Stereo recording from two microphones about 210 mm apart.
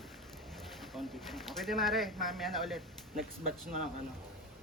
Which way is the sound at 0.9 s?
Centre (ahead or behind).